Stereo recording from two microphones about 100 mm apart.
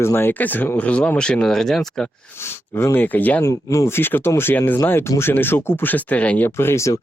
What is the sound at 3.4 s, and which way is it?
Speech, 30° left (ahead or behind).